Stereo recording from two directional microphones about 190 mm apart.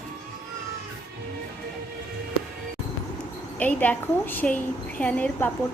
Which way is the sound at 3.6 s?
10° left (ahead or behind).